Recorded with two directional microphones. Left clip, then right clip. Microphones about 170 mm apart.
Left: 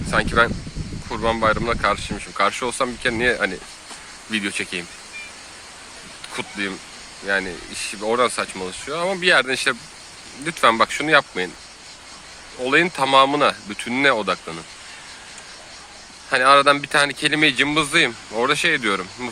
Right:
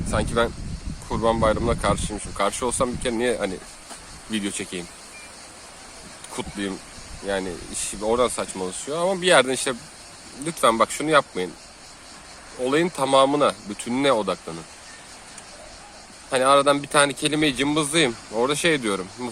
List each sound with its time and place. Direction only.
0.1 s speech: 10° right (ahead or behind)
1.1 s speech: 20° right (ahead or behind)
6.3 s speech: 25° right (ahead or behind)
12.6 s speech: 10° right (ahead or behind)
16.3 s speech: 10° right (ahead or behind)